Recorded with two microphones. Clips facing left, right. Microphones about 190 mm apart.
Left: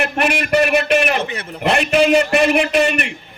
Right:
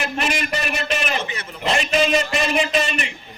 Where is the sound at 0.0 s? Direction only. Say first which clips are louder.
Left 5 dB; 60° left (ahead or behind).